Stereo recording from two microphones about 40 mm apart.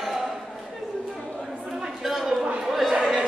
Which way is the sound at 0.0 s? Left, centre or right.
Centre.